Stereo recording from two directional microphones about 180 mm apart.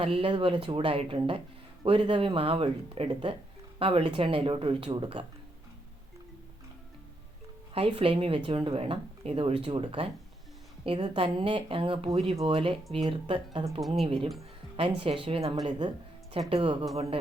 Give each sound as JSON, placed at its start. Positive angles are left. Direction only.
{"t": 0.0, "sound": "speech", "side_deg": -30}
{"t": 7.7, "sound": "speech", "side_deg": -30}